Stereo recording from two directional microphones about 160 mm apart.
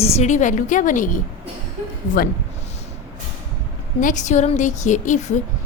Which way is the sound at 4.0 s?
50° left (ahead or behind).